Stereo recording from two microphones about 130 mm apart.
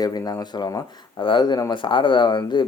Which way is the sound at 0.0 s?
30° left (ahead or behind).